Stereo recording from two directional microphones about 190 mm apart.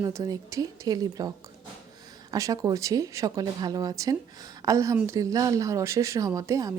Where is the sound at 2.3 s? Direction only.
20° right (ahead or behind).